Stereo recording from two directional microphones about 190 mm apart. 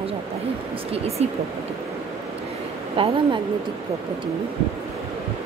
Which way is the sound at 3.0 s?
30° right (ahead or behind).